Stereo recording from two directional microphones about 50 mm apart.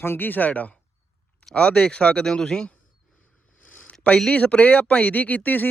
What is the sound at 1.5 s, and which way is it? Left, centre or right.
Speech, left.